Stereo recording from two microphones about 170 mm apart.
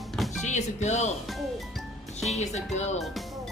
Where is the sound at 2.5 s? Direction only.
40° left (ahead or behind).